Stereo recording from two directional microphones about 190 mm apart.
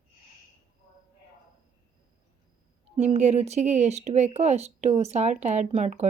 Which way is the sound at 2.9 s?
35° right (ahead or behind).